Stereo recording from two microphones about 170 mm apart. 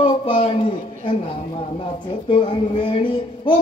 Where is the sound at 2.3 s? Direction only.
30° left (ahead or behind).